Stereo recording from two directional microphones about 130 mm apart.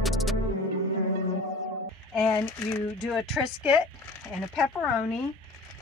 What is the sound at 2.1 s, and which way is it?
Speech, 5° left (ahead or behind).